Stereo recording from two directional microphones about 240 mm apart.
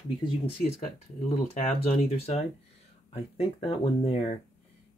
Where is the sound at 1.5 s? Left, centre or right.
Left.